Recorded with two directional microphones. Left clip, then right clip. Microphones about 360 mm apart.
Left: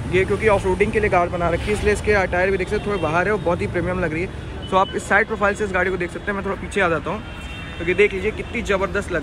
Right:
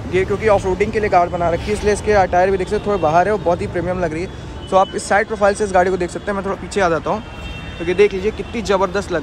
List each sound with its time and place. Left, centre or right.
0.1 s speech: right
0.5 s speech: centre